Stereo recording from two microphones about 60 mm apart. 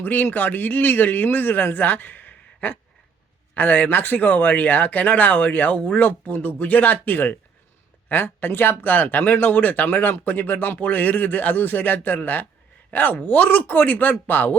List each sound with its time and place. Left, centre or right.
0.0 s speech: left